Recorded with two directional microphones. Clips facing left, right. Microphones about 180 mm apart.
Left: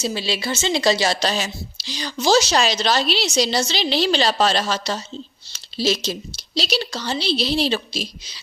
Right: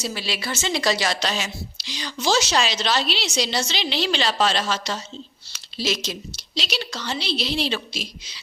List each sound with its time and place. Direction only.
0.0 s a woman's voice: 25° left (ahead or behind)